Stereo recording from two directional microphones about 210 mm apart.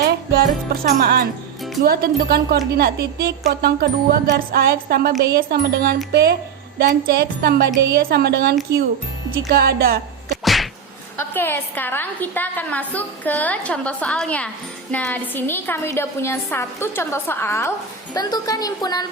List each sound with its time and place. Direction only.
0.0 s music: 45° right (ahead or behind)
0.9 s speech: 50° right (ahead or behind)
10.4 s whack: centre (ahead or behind)
11.3 s a woman's voice: 10° left (ahead or behind)